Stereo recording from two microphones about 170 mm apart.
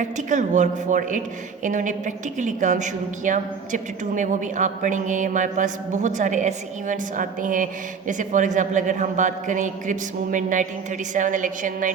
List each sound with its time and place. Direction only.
0.0 s a woman's voice: 45° right (ahead or behind)